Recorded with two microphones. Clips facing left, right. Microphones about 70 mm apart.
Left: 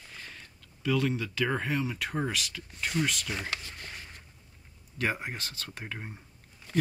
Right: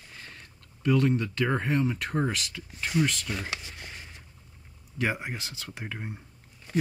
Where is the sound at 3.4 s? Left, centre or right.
Centre.